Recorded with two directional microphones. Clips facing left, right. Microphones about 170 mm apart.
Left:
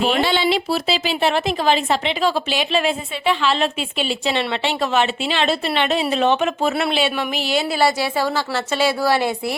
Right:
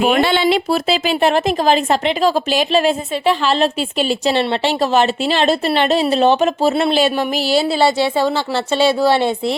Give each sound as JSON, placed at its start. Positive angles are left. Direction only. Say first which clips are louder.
{"t": 0.0, "sound": "a woman's voice", "louder": "right 4 dB", "side_deg": -55}